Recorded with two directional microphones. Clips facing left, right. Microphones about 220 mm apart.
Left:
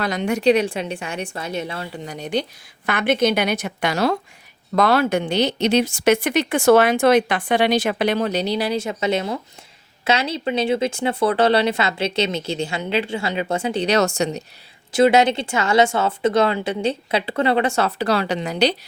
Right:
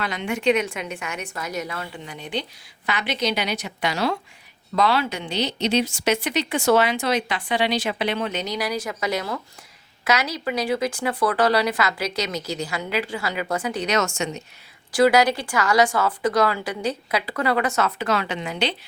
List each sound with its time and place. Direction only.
0.0 s a woman's voice: 40° left (ahead or behind)
2.0 s a woman's voice: 40° left (ahead or behind)
2.8 s speech: 50° left (ahead or behind); by 14.4 s 35° left (ahead or behind)
14.9 s speech: 25° left (ahead or behind); by 18.8 s 40° left (ahead or behind)